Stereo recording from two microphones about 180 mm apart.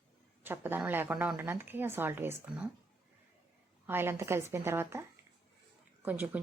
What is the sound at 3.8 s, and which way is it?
Speech, 10° right (ahead or behind).